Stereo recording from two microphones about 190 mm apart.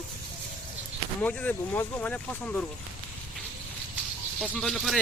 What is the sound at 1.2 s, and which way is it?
Speech, 10° left (ahead or behind).